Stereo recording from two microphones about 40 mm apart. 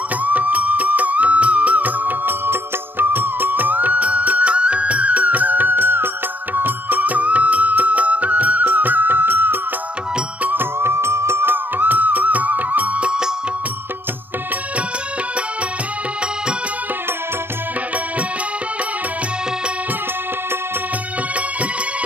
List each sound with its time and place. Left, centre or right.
0.2 s music: right
10.5 s music: right
11.5 s music: right